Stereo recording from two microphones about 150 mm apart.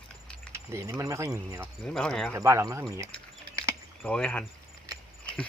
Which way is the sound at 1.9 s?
5° left (ahead or behind).